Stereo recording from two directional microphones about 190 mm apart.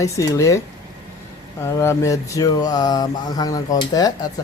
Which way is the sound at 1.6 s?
15° left (ahead or behind).